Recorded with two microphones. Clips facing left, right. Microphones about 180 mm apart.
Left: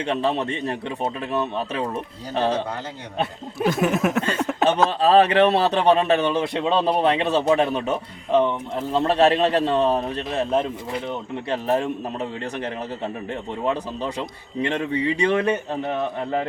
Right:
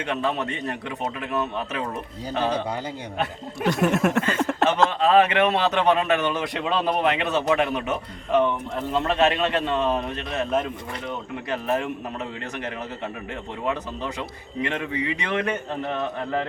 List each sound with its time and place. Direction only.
0.0 s speech: 30° left (ahead or behind)
3.6 s a sound: centre (ahead or behind)
4.4 s speech: centre (ahead or behind)
4.9 s a man's voice: 35° left (ahead or behind)
13.7 s a man's voice: 30° left (ahead or behind)